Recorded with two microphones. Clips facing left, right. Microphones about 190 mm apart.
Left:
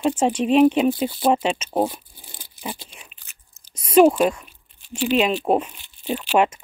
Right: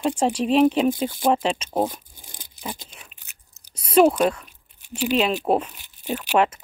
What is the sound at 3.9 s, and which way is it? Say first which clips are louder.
Speech: left 2 dB; 5° left (ahead or behind).